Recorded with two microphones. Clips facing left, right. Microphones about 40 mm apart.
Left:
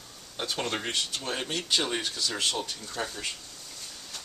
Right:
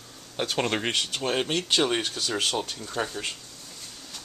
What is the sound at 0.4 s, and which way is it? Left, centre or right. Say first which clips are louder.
Speech: right 5 dB; right.